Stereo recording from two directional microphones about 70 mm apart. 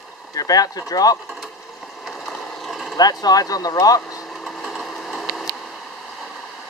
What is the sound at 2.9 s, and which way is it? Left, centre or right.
Speech, left.